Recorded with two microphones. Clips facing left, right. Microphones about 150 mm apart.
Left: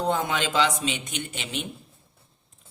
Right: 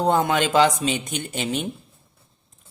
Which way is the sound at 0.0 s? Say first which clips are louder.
Right 6 dB; 50° right (ahead or behind).